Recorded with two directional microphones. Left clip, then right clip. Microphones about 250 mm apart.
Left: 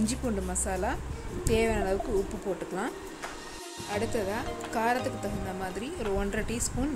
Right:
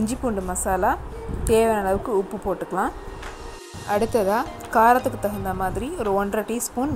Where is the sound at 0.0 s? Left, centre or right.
Centre.